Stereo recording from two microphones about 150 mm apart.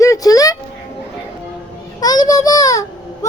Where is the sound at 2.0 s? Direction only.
25° left (ahead or behind).